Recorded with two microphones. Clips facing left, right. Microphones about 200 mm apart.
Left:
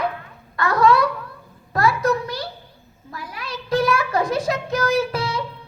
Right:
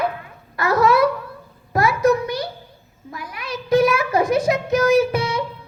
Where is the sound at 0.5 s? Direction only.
25° right (ahead or behind).